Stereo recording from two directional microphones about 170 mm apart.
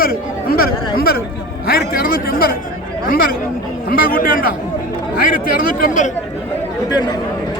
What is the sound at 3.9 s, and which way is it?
Chatter, 60° left (ahead or behind).